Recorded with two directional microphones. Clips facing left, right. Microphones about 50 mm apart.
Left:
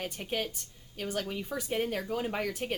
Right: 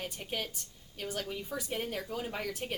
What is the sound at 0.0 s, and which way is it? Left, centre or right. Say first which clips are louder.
Speech: left 4 dB; left.